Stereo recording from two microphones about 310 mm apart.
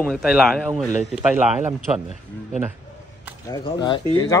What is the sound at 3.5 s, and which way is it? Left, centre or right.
Speech, centre.